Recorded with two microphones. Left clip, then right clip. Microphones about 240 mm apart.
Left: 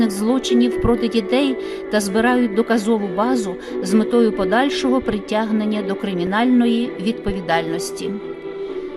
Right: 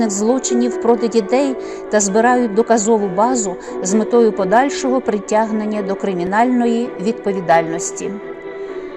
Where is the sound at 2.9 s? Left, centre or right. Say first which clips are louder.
Right 4 dB; centre.